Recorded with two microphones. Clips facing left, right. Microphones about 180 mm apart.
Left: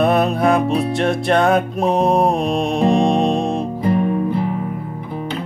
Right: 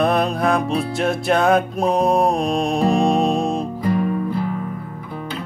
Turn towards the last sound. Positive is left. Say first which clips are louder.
# left 3 dB
turn(degrees=25)  # may be behind; listen again after turning